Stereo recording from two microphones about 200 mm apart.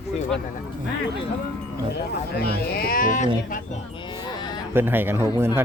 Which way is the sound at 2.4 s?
50° left (ahead or behind).